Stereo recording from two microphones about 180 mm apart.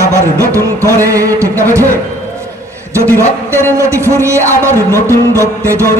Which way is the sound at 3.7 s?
15° right (ahead or behind).